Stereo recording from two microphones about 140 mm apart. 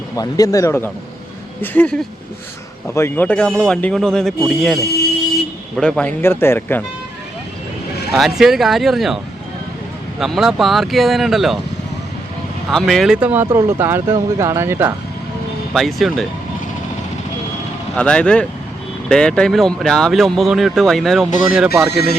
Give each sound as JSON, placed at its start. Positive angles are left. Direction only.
{"t": 0.2, "sound": "speech", "side_deg": 25}
{"t": 8.1, "sound": "speech", "side_deg": 0}
{"t": 12.7, "sound": "speech", "side_deg": 0}
{"t": 15.7, "sound": "speech", "side_deg": 0}
{"t": 17.9, "sound": "speech", "side_deg": 5}